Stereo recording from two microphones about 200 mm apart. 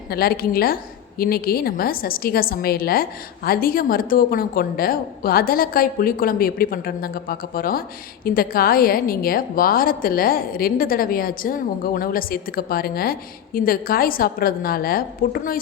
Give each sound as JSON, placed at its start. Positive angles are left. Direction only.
{"t": 0.1, "sound": "a woman's voice", "side_deg": 50}